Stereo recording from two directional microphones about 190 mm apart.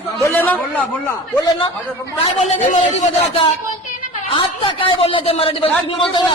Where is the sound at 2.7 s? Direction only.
35° left (ahead or behind).